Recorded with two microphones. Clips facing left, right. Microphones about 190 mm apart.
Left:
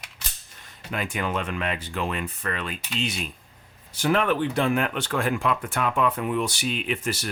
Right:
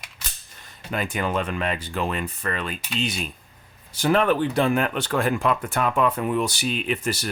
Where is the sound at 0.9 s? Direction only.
40° right (ahead or behind).